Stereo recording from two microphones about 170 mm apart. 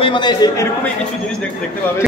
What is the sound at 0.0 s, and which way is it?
Speech, 25° left (ahead or behind).